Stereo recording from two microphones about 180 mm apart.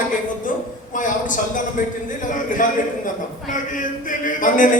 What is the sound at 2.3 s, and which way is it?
Speech, 45° left (ahead or behind).